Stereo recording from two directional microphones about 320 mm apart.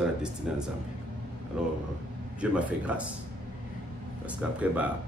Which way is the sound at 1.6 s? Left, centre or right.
Centre.